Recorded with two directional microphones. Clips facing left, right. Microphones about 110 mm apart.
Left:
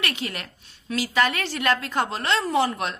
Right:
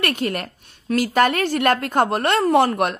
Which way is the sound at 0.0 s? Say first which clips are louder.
Right 8 dB; 50° right (ahead or behind).